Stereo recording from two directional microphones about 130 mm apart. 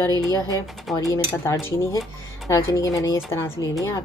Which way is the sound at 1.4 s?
20° left (ahead or behind).